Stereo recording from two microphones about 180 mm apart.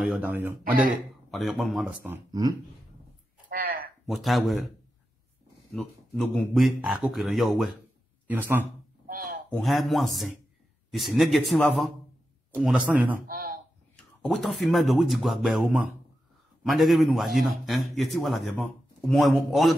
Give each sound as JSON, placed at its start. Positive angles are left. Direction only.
{"t": 0.2, "sound": "speech", "side_deg": -10}
{"t": 1.3, "sound": "a man's voice", "side_deg": 0}
{"t": 2.0, "sound": "speech", "side_deg": -20}
{"t": 3.4, "sound": "a sound", "side_deg": -55}
{"t": 4.0, "sound": "a man's voice", "side_deg": 0}
{"t": 5.8, "sound": "a man's voice", "side_deg": 0}
{"t": 9.0, "sound": "a sound", "side_deg": -50}
{"t": 9.5, "sound": "a man's voice", "side_deg": 0}
{"t": 13.3, "sound": "a man's voice", "side_deg": -50}
{"t": 13.9, "sound": "a man's voice", "side_deg": 0}